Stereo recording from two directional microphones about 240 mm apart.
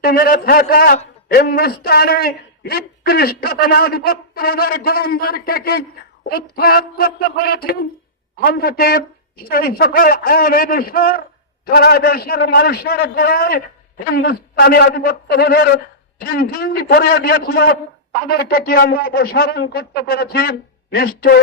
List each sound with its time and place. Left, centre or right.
0.0 s a man's voice: left